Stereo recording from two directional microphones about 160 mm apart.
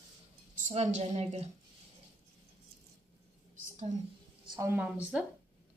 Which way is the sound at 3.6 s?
45° right (ahead or behind).